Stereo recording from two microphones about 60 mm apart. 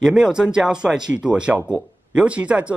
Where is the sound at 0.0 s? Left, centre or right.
Centre.